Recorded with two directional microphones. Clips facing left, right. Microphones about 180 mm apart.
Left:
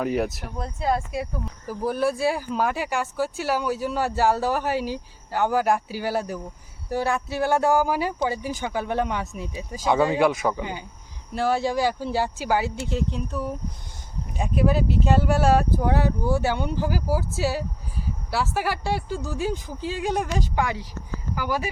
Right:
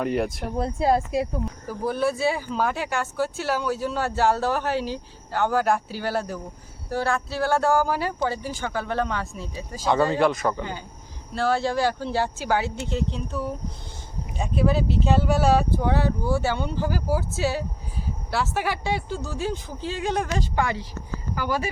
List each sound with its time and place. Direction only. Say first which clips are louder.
0.0 s speech: even; centre (ahead or behind)
0.5 s speech: right 5 dB; 30° right (ahead or behind)
1.6 s speech: left 1 dB; 10° left (ahead or behind)